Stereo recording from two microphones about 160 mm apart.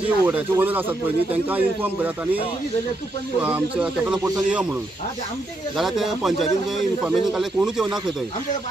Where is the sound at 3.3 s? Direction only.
10° right (ahead or behind).